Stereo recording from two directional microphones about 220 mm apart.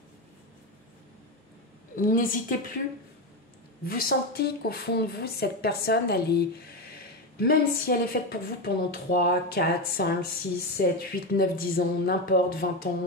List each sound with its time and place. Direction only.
2.0 s a woman's voice: 40° left (ahead or behind)
3.8 s a woman's voice: 45° left (ahead or behind)